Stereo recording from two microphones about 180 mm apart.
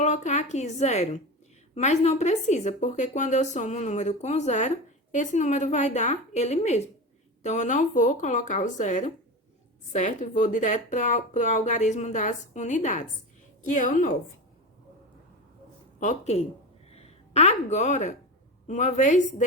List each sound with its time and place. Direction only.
0.0 s a woman's voice: 40° left (ahead or behind)
16.0 s a woman's voice: 40° left (ahead or behind)